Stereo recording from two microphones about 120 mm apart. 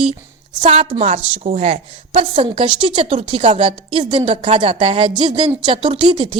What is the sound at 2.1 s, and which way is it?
A woman's voice, 50° right (ahead or behind).